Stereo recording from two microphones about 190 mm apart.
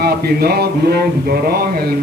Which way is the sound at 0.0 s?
55° right (ahead or behind).